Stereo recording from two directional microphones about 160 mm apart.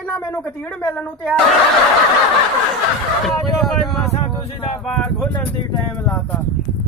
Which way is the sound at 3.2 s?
Centre (ahead or behind).